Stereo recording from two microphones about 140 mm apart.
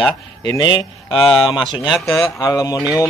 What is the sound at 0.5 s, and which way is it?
Speech, 35° left (ahead or behind).